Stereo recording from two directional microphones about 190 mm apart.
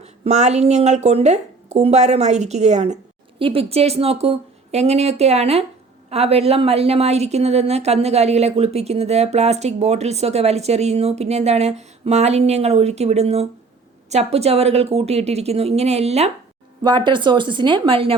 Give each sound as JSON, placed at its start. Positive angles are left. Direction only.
{"t": 0.0, "sound": "a woman's voice", "side_deg": -35}